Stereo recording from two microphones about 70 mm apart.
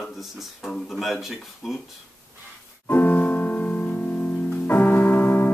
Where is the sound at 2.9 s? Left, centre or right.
Left.